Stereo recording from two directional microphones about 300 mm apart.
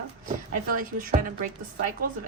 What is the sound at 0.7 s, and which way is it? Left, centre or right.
A woman's voice, right.